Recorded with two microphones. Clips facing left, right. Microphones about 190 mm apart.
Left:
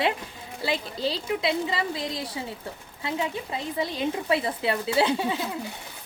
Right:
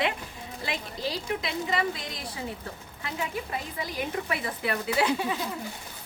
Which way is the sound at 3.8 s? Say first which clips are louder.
Left 4 dB; 25° left (ahead or behind).